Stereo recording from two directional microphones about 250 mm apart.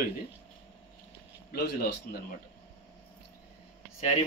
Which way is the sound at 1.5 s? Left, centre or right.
Left.